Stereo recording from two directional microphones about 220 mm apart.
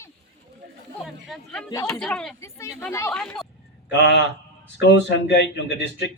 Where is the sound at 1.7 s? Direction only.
15° left (ahead or behind).